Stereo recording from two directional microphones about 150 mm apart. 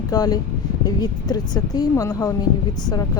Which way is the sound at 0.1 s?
25° left (ahead or behind).